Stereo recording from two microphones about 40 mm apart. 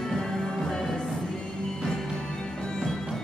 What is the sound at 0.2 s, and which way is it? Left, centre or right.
Music, centre.